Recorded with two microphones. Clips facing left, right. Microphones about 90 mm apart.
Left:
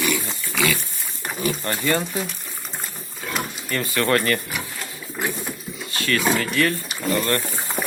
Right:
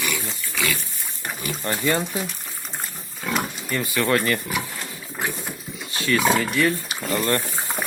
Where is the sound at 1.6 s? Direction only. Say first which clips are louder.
Right 3 dB; 10° right (ahead or behind).